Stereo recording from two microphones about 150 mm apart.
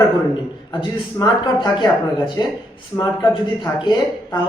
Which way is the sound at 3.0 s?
30° left (ahead or behind).